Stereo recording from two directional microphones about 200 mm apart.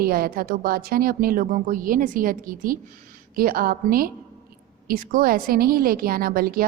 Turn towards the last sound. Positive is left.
turn(degrees=-45)  # may be behind; listen again after turning